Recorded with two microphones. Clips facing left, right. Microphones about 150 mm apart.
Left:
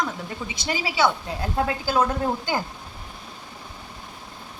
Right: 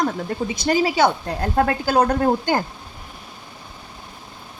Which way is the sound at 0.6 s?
45° right (ahead or behind).